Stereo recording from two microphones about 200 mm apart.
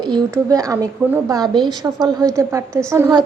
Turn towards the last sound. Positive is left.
turn(degrees=-15)  # may be behind; listen again after turning